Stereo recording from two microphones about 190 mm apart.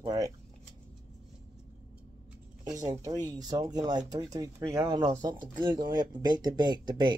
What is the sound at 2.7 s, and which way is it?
Speech, 20° right (ahead or behind).